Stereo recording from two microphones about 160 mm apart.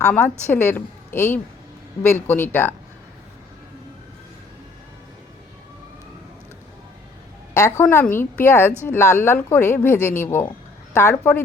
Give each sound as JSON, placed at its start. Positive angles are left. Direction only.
{"t": 0.1, "sound": "a woman's voice", "side_deg": 10}
{"t": 7.5, "sound": "a woman's voice", "side_deg": 15}